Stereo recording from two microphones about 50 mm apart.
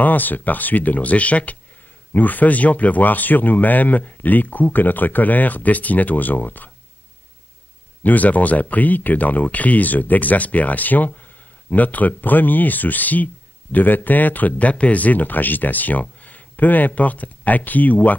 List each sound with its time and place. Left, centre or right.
0.0 s speech: left
8.0 s speech: left